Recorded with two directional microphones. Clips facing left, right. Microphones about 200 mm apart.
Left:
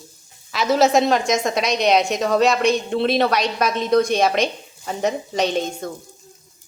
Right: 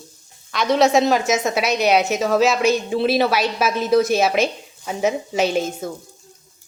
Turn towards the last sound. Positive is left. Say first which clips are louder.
# right 1 dB
turn(degrees=-5)  # may be behind; listen again after turning